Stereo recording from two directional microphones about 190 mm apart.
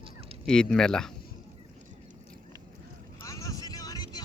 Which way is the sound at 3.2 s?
15° left (ahead or behind).